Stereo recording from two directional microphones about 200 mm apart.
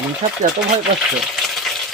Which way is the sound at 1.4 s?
Centre (ahead or behind).